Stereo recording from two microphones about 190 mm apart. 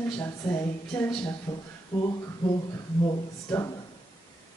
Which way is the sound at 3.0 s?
15° left (ahead or behind).